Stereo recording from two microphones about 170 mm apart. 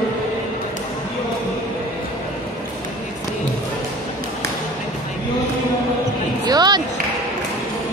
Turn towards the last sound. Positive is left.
turn(degrees=-25)  # may be behind; listen again after turning